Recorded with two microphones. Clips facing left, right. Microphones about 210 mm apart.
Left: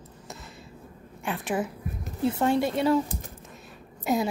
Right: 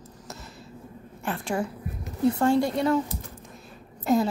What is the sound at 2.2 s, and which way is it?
Speech, 25° left (ahead or behind).